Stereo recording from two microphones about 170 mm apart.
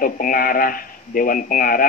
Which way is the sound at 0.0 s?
55° left (ahead or behind).